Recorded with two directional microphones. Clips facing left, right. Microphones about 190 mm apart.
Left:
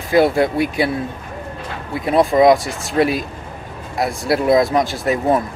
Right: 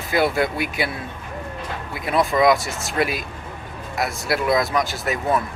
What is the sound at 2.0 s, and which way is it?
Speech, 30° left (ahead or behind).